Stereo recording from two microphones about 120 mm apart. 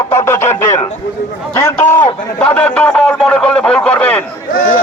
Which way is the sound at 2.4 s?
15° left (ahead or behind).